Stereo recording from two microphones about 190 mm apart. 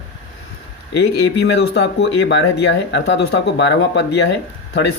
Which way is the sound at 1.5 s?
70° left (ahead or behind).